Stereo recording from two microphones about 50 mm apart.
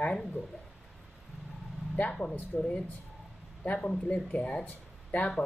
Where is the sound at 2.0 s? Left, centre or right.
Left.